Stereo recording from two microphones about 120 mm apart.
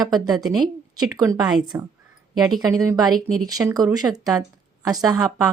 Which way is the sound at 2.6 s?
30° right (ahead or behind).